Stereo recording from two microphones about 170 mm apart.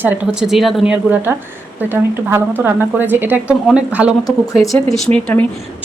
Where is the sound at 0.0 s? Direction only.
5° right (ahead or behind).